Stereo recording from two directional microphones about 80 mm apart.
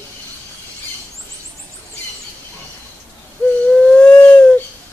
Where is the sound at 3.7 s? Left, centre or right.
Centre.